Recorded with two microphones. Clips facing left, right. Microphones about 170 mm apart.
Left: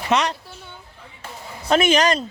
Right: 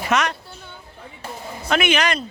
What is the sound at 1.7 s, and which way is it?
Speech, 40° left (ahead or behind).